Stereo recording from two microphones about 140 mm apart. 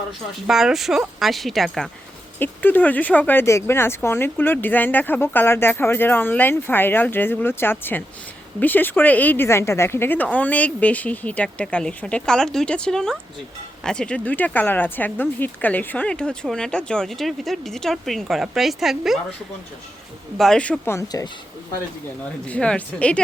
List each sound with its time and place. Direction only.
0.4 s speech: centre (ahead or behind)
2.4 s speech: 15° left (ahead or behind); by 19.2 s centre (ahead or behind)
20.4 s speech: 5° left (ahead or behind)
22.4 s speech: 10° left (ahead or behind)